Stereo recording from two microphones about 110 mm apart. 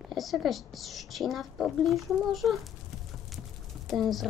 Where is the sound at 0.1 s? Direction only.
Centre (ahead or behind).